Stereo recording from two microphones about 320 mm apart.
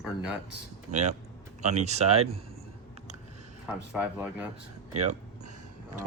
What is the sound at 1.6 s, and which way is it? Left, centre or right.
Speech, right.